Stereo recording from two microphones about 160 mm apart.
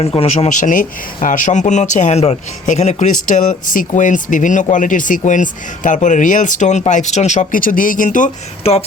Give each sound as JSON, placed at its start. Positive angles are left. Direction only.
{"t": 0.0, "sound": "speech", "side_deg": 40}
{"t": 8.7, "sound": "speech", "side_deg": 40}